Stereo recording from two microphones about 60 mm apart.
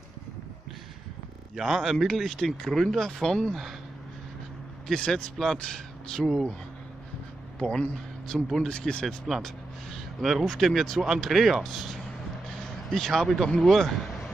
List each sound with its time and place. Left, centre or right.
1.6 s speech: centre
4.8 s a man's voice: centre
7.5 s speech: centre
8.6 s speech: centre
9.0 s speech: centre